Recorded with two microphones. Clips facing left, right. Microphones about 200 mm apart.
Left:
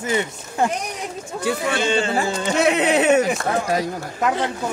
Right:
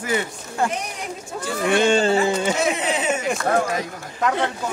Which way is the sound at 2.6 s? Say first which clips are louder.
Left 5 dB; 65° left (ahead or behind).